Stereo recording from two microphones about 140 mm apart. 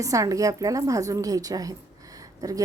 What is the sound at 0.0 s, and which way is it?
Speech, 25° right (ahead or behind).